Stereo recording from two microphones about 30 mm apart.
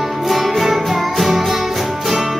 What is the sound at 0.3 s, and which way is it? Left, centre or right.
Music, centre.